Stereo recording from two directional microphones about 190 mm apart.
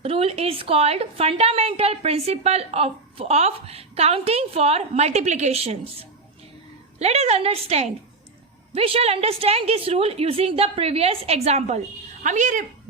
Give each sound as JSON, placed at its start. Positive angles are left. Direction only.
{"t": 0.0, "sound": "a woman's voice", "side_deg": -30}